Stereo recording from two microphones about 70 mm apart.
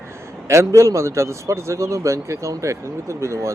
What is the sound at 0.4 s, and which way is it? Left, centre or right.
A man's voice, right.